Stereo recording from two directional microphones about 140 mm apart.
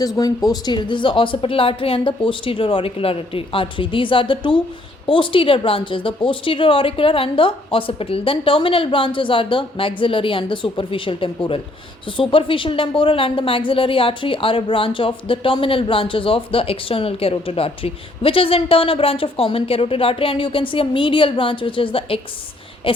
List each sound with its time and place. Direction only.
0.0 s a woman's voice: 25° left (ahead or behind)